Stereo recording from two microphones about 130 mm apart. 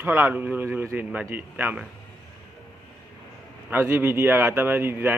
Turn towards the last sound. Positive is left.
turn(degrees=-15)  # may be behind; listen again after turning